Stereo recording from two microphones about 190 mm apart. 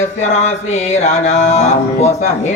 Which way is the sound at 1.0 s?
40° left (ahead or behind).